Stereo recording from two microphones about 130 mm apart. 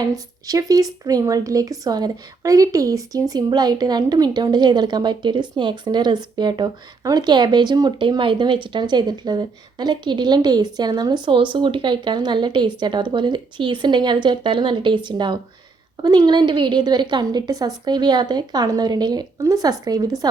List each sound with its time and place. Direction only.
0.4 s a woman's voice: 25° right (ahead or behind)